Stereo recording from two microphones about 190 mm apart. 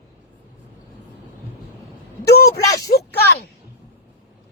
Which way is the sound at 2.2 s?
55° left (ahead or behind).